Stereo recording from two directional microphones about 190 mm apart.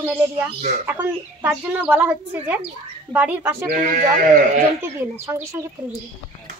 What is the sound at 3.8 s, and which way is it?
Speech, 45° right (ahead or behind).